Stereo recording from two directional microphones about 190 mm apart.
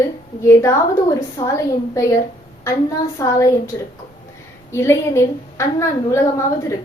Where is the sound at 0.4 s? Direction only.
15° left (ahead or behind).